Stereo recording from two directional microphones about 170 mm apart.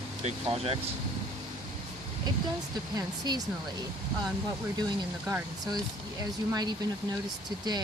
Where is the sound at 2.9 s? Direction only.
25° right (ahead or behind).